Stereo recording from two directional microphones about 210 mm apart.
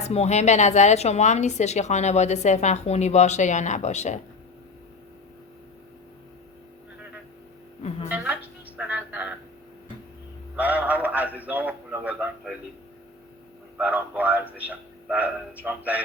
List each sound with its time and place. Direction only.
0.1 s speech: 30° left (ahead or behind)
8.1 s music: 5° right (ahead or behind)
10.6 s a man's voice: 5° right (ahead or behind)
13.7 s a man's voice: 5° right (ahead or behind)